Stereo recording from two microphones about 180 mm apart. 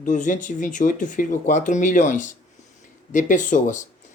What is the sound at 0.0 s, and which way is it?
Speech, 45° left (ahead or behind).